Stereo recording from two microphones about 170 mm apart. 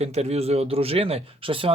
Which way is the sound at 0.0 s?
40° right (ahead or behind).